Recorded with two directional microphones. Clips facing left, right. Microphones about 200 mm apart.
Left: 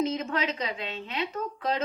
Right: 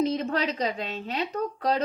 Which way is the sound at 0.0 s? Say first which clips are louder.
Right 3 dB; 35° right (ahead or behind).